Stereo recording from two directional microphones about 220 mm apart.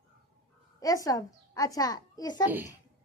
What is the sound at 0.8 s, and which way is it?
A child's voice, 15° left (ahead or behind).